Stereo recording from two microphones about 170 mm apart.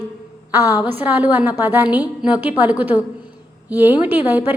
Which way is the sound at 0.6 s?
20° left (ahead or behind).